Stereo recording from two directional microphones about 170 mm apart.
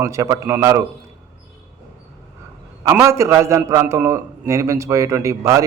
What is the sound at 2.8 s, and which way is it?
A man's voice, 15° right (ahead or behind).